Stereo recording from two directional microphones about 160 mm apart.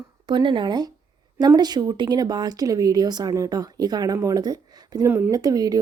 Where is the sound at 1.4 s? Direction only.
25° right (ahead or behind).